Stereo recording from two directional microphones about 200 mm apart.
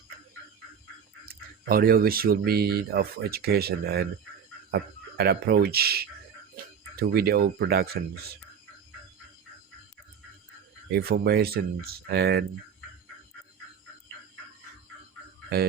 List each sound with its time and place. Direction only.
1.2 s speech: 50° right (ahead or behind)
10.9 s speech: 50° right (ahead or behind)